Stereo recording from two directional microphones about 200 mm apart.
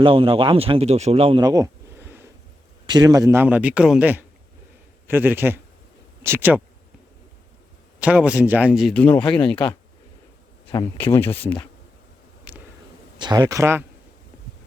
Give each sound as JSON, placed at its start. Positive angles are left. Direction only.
{"t": 0.0, "sound": "a man's voice", "side_deg": -25}
{"t": 7.9, "sound": "speech", "side_deg": -5}
{"t": 10.9, "sound": "speech", "side_deg": 10}
{"t": 12.5, "sound": "a sound", "side_deg": -5}
{"t": 13.1, "sound": "a man's voice", "side_deg": -20}